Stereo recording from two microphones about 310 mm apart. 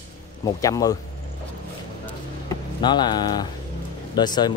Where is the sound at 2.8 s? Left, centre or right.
Centre.